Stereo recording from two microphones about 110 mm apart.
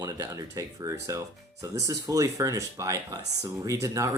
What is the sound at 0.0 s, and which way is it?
Speech, 35° right (ahead or behind).